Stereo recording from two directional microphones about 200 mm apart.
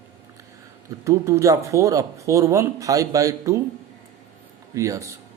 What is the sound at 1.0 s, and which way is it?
Speech, 15° right (ahead or behind).